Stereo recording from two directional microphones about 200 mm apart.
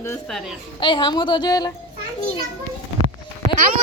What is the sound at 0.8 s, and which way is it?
Speech, 25° left (ahead or behind).